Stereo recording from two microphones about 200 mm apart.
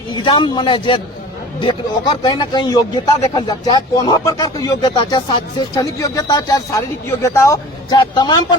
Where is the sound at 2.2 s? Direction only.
20° left (ahead or behind).